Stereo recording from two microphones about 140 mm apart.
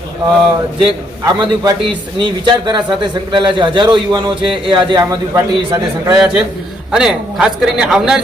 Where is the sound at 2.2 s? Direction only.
35° right (ahead or behind).